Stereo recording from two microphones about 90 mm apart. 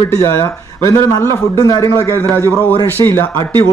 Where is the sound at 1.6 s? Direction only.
40° left (ahead or behind).